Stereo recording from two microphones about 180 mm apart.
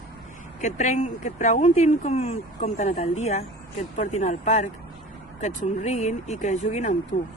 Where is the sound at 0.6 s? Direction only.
40° left (ahead or behind).